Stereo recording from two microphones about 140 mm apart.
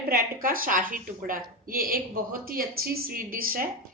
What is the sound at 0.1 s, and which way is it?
A woman's voice, 90° right.